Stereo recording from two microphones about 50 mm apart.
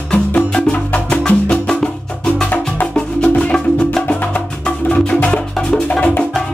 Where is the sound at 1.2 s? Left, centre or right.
Centre.